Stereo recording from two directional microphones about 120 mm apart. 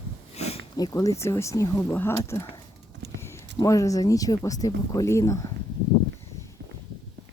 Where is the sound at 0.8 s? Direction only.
30° left (ahead or behind).